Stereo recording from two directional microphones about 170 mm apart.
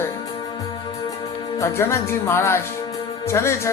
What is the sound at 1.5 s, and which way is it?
A man's voice, 15° left (ahead or behind).